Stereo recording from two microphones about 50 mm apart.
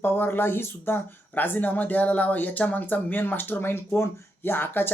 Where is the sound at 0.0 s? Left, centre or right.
Left.